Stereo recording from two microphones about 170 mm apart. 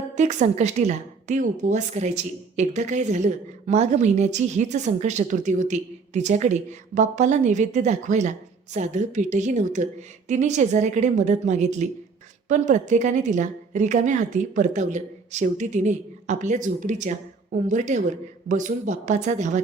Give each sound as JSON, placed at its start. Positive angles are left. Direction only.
{"t": 0.2, "sound": "a woman's voice", "side_deg": -45}